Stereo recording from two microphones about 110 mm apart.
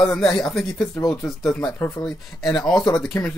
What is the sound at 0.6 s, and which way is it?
Speech, 20° left (ahead or behind).